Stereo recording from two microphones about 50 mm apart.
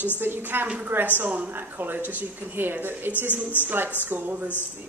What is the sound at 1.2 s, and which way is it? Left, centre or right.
Speech, right.